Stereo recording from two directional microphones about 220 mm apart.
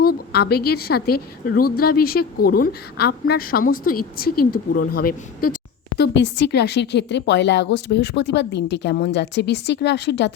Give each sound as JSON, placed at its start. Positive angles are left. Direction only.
{"t": 0.0, "sound": "a woman's voice", "side_deg": 45}